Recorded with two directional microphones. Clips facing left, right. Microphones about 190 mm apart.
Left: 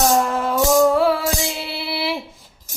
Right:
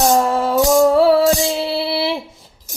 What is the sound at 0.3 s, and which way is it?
Music, 30° right (ahead or behind).